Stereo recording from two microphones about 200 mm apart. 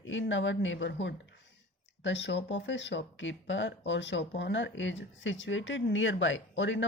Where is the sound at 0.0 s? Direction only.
70° left (ahead or behind).